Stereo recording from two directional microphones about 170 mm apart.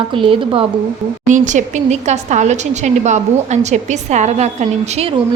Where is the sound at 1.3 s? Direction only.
45° right (ahead or behind).